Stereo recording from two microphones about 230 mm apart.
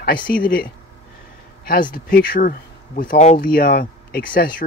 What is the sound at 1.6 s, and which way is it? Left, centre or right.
Speech, left.